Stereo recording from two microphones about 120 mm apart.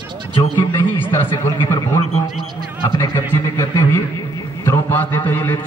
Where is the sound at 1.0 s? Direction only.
20° left (ahead or behind).